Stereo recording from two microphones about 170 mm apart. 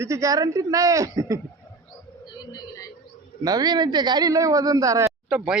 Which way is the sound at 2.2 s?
25° left (ahead or behind).